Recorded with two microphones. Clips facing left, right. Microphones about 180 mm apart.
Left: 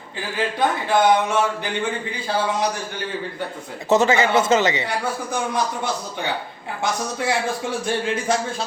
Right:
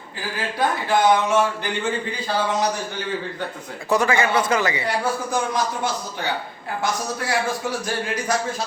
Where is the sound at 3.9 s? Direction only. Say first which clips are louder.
Left 3 dB; 25° left (ahead or behind).